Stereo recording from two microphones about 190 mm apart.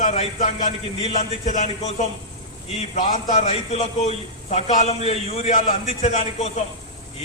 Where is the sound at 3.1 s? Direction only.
35° left (ahead or behind).